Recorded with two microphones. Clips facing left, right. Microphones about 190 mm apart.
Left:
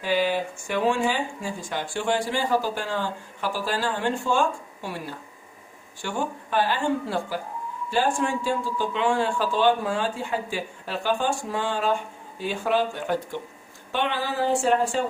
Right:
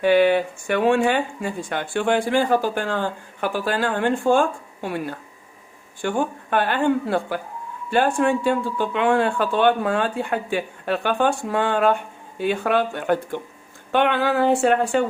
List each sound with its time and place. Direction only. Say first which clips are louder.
0.0 s speech: right 8 dB; 60° right (ahead or behind)